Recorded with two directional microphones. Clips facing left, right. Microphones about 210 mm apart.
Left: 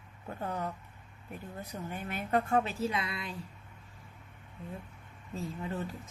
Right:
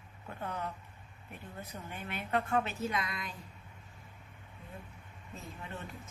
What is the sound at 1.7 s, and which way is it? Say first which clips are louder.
A woman's voice: left 4 dB; 40° left (ahead or behind).